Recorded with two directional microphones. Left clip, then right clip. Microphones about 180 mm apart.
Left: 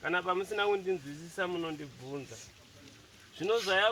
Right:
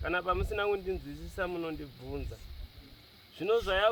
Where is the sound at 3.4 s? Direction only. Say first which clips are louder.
Even; 20° right (ahead or behind).